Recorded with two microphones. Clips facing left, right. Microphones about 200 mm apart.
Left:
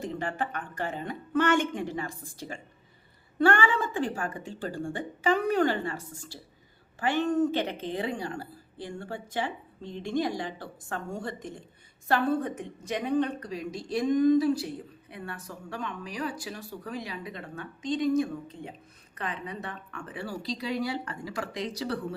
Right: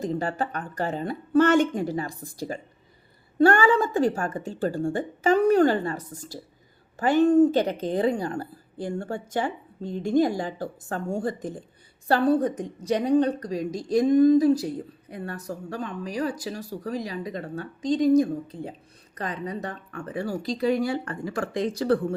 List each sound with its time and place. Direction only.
0.0 s a woman's voice: 35° right (ahead or behind)